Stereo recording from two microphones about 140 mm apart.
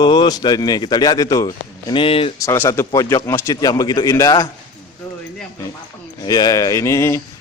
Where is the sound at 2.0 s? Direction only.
40° left (ahead or behind).